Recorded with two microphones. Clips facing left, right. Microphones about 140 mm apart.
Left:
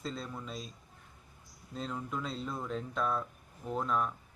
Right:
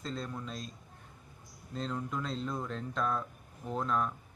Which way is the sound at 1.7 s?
5° left (ahead or behind).